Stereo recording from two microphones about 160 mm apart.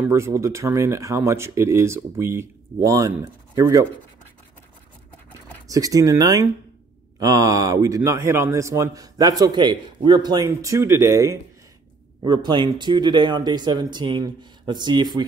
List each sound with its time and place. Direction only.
0.0 s a man's voice: 15° right (ahead or behind)
5.7 s a man's voice: 20° right (ahead or behind)